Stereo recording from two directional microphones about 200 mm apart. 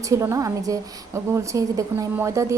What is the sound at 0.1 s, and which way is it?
A woman's voice, 15° right (ahead or behind).